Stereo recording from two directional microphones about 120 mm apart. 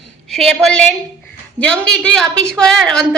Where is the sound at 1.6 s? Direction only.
10° left (ahead or behind).